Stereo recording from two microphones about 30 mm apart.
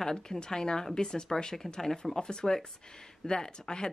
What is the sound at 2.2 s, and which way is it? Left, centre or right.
A woman's voice, left.